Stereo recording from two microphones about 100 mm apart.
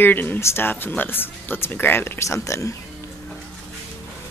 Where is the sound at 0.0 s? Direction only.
20° left (ahead or behind).